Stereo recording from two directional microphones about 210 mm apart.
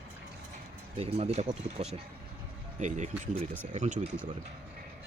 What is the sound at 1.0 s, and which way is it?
A man's voice, 30° right (ahead or behind).